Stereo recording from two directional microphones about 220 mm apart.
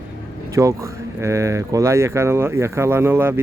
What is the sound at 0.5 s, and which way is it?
Speech, 15° right (ahead or behind).